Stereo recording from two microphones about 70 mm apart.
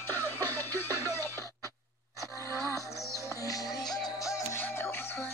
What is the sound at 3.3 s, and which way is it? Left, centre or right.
Music, left.